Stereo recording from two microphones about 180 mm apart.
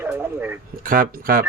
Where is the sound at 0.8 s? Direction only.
50° right (ahead or behind).